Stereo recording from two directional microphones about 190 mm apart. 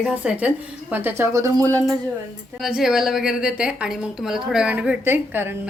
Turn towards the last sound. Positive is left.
turn(degrees=-10)  # may be behind; listen again after turning